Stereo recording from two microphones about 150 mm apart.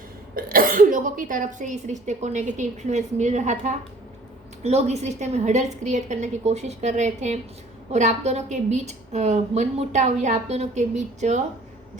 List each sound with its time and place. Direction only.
0.3 s a woman's voice: 70° right (ahead or behind); by 11.4 s 50° right (ahead or behind)